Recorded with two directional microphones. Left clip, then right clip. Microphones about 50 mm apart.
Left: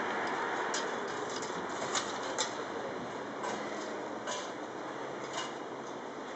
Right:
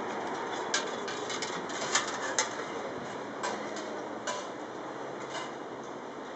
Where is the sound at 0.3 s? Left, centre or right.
Right.